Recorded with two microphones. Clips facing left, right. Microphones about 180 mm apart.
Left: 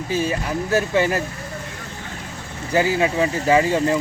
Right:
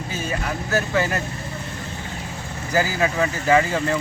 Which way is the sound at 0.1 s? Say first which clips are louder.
Left 5 dB; 30° left (ahead or behind).